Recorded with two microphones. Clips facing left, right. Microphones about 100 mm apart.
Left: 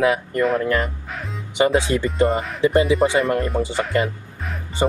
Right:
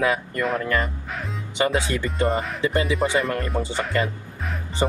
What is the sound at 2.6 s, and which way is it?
Speech, 25° left (ahead or behind).